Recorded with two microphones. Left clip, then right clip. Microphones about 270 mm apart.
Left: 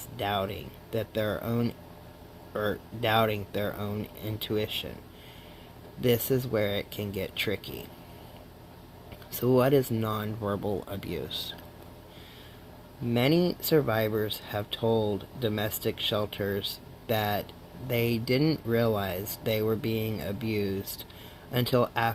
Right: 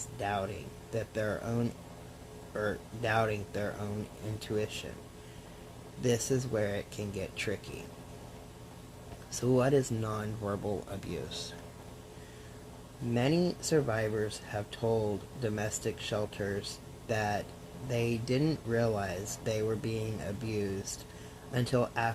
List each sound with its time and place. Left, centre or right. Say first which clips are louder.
0.2 s speech: left 4 dB; left
6.0 s speech: left 5 dB; left
9.3 s speech: left 4 dB; left
13.1 s speech: left 5 dB; left